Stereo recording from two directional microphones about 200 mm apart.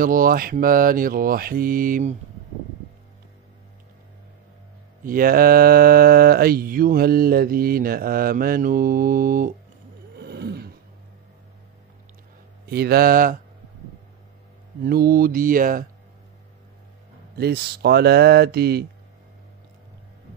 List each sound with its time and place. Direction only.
0.0 s mantra: 45° right (ahead or behind)
5.0 s mantra: 45° right (ahead or behind)
10.1 s a sound: 55° right (ahead or behind)
12.6 s mantra: 50° right (ahead or behind)
14.8 s mantra: 50° right (ahead or behind)
17.4 s mantra: 50° right (ahead or behind)